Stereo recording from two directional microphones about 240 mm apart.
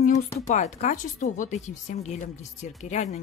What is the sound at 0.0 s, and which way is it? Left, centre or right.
Speech, left.